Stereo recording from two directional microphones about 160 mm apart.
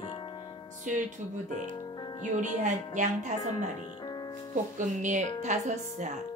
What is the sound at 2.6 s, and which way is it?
Speech, 50° right (ahead or behind).